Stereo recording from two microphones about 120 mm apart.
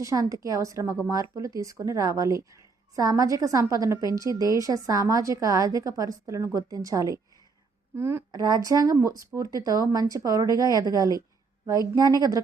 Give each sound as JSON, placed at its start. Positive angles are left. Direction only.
{"t": 0.0, "sound": "a woman's voice", "side_deg": -30}
{"t": 8.3, "sound": "a woman's voice", "side_deg": -35}